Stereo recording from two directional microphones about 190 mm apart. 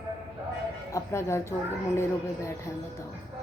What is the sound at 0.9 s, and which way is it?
A woman's voice, 15° left (ahead or behind).